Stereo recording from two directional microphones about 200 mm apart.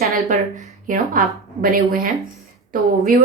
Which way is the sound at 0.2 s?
40° right (ahead or behind).